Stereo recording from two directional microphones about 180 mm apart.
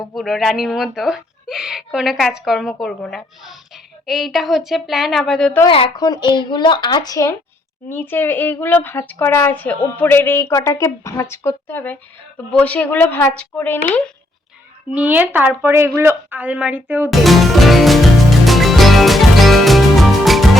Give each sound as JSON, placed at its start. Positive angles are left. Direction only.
{"t": 0.0, "sound": "speech", "side_deg": 0}
{"t": 5.6, "sound": "speech", "side_deg": 30}
{"t": 14.9, "sound": "a woman's voice", "side_deg": -10}
{"t": 17.1, "sound": "speech", "side_deg": 0}
{"t": 18.4, "sound": "music", "side_deg": 0}